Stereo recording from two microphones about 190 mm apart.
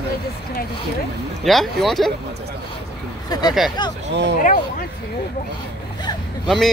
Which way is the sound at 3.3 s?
20° left (ahead or behind).